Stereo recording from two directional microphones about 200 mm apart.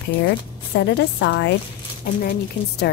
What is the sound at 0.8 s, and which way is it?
Speech, 60° left (ahead or behind).